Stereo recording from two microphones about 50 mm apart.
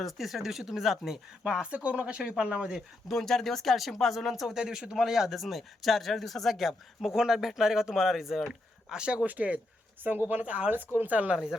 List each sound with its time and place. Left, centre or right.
0.0 s speech: centre; by 2.7 s right
3.1 s a man's voice: centre
4.5 s a man's voice: centre
7.1 s speech: centre
8.9 s speech: centre
9.2 s speech: right
10.4 s speech: right
10.7 s speech: right